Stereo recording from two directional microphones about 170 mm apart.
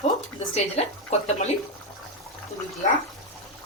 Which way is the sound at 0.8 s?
40° left (ahead or behind).